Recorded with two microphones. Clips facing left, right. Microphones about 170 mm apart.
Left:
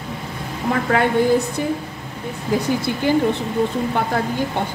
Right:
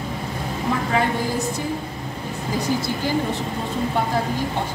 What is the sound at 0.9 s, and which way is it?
Speech, 60° left (ahead or behind).